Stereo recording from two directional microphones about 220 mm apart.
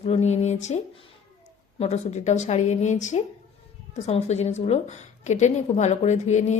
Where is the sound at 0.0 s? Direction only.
30° left (ahead or behind).